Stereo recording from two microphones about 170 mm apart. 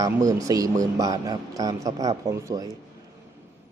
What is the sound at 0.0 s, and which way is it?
Speech, 20° right (ahead or behind).